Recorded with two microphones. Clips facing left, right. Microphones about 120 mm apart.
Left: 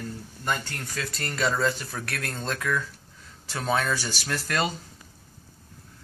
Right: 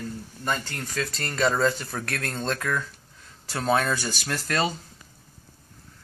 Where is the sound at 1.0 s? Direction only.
30° right (ahead or behind).